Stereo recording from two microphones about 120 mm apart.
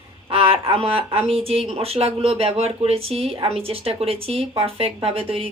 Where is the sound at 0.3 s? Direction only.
55° right (ahead or behind).